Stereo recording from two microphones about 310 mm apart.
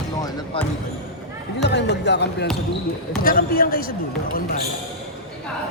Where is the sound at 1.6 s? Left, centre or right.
Left.